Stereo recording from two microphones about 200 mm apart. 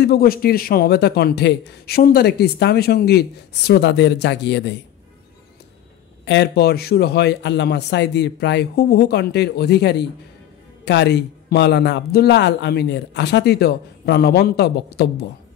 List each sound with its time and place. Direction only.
0.0 s a man's voice: 50° left (ahead or behind)
6.2 s speech: 60° left (ahead or behind)